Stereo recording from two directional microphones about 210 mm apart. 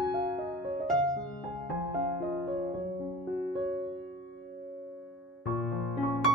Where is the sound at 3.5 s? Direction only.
Centre (ahead or behind).